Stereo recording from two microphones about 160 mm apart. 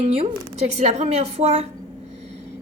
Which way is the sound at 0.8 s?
40° right (ahead or behind).